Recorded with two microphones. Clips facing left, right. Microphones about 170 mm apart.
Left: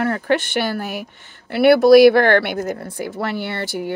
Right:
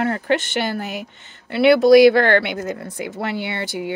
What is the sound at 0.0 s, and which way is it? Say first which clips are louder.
Speech: left 1 dB; 60° left (ahead or behind).